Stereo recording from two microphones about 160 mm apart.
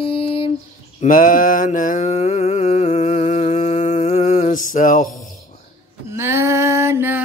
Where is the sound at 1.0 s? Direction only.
55° left (ahead or behind); by 4.5 s 40° left (ahead or behind).